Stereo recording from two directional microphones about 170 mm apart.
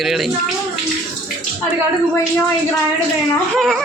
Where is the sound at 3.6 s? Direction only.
Centre (ahead or behind).